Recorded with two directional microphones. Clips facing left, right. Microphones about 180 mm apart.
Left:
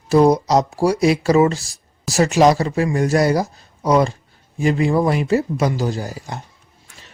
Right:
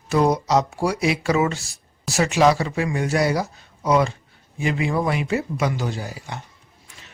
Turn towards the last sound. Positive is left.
turn(degrees=40)  # may be behind; listen again after turning